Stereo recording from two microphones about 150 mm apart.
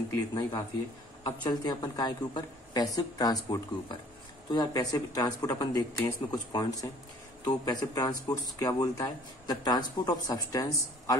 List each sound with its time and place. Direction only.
0.3 s speech: 30° left (ahead or behind)